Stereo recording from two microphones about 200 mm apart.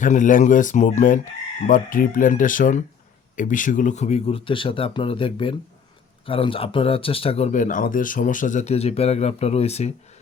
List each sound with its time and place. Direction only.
0.0 s speech: 40° left (ahead or behind)